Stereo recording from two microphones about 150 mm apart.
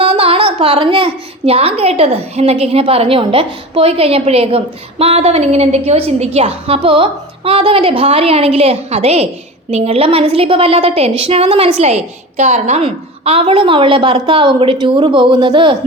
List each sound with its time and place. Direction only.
0.0 s a woman's voice: 40° right (ahead or behind)